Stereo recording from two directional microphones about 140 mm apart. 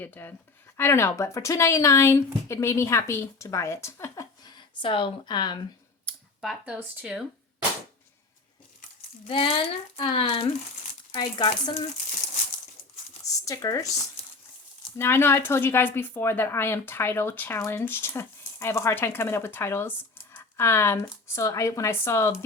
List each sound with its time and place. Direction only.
0.0 s a woman's voice: 15° left (ahead or behind); by 5.5 s 30° left (ahead or behind)
6.4 s speech: 5° right (ahead or behind)
9.3 s speech: 40° left (ahead or behind)
13.2 s speech: 25° left (ahead or behind)
14.9 s a woman's voice: 15° left (ahead or behind)